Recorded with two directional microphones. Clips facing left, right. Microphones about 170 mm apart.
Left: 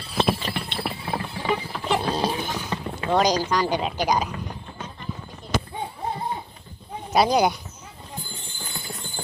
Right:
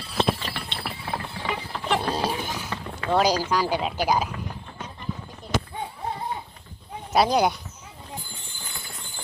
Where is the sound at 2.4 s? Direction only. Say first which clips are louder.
Left 2 dB; 10° right (ahead or behind).